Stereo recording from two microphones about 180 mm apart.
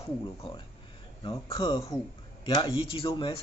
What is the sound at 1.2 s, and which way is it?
Speech, 30° left (ahead or behind).